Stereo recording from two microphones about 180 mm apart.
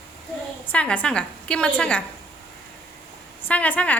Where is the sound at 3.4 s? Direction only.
10° left (ahead or behind).